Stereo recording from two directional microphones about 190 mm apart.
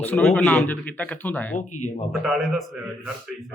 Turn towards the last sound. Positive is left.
turn(degrees=0)  # may be behind; listen again after turning